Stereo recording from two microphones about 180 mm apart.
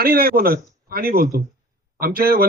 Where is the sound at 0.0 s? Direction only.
55° right (ahead or behind).